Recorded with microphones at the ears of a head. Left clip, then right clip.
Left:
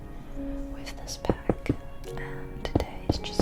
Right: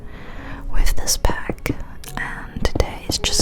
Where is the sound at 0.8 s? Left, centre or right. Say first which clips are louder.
Right 14 dB; right.